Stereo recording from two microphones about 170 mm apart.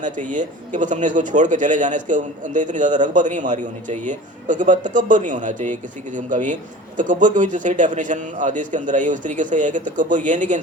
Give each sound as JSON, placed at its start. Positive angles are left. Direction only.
{"t": 0.0, "sound": "speech", "side_deg": -45}